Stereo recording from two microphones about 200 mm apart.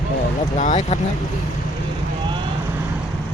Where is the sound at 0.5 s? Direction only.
35° left (ahead or behind).